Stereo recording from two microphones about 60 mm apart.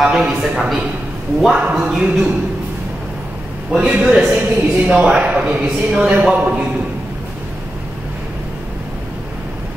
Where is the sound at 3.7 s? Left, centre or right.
Centre.